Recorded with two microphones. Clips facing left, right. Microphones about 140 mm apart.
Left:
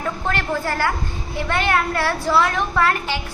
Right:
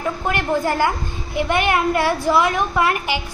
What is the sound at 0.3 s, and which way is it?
A woman's voice, 15° right (ahead or behind).